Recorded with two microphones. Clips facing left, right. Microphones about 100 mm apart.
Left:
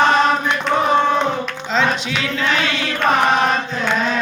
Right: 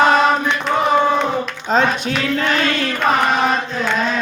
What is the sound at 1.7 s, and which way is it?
Music, 45° right (ahead or behind).